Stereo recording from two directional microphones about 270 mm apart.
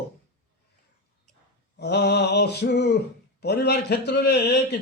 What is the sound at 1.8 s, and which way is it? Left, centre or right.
A man's voice, left.